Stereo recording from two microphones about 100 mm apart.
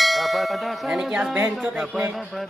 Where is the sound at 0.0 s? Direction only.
Centre (ahead or behind).